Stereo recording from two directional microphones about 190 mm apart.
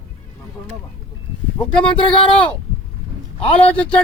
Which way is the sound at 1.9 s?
25° left (ahead or behind).